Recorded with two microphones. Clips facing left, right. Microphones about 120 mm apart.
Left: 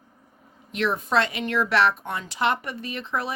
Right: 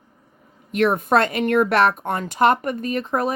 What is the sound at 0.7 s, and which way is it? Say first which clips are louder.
Speech: right 7 dB; 50° right (ahead or behind).